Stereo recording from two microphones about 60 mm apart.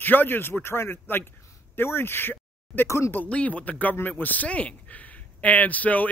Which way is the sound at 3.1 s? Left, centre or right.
Left.